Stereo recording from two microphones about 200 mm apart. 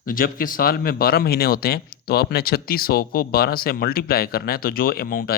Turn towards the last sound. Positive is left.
turn(degrees=50)  # may be behind; listen again after turning